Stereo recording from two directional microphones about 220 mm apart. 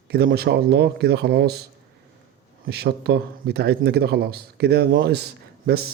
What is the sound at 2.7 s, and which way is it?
A man's voice, 45° right (ahead or behind).